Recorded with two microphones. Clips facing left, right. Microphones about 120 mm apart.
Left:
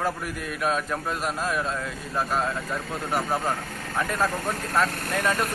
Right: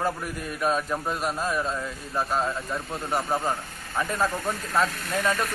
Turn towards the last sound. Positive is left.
turn(degrees=10)  # may be behind; listen again after turning